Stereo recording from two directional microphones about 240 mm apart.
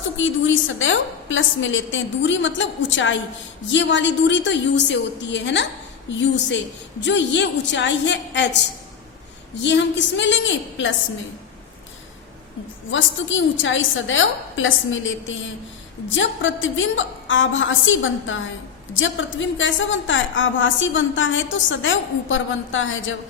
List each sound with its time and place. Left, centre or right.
0.2 s a woman's voice: left
9.6 s a woman's voice: left
12.9 s a woman's voice: left